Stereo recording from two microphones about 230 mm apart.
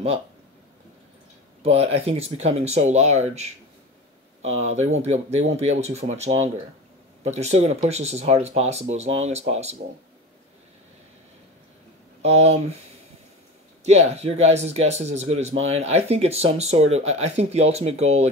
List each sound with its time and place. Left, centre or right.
1.6 s speech: right
12.2 s speech: right
13.8 s speech: right